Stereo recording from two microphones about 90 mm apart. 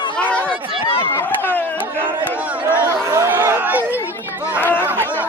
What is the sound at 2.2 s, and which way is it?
Crowd, 20° right (ahead or behind).